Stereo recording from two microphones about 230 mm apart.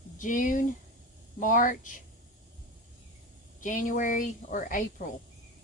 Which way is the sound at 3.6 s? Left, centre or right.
Left.